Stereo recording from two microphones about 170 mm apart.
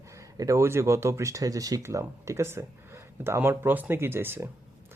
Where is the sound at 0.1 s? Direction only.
20° right (ahead or behind).